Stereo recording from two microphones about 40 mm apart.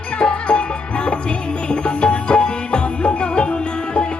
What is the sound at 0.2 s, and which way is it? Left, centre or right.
Music, left.